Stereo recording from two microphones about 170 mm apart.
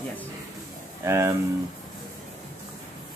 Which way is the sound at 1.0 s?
15° right (ahead or behind).